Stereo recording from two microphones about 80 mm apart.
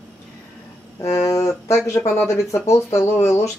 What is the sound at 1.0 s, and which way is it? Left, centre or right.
Speech, left.